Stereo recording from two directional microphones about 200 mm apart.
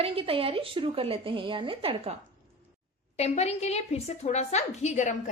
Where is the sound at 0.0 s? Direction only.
30° right (ahead or behind).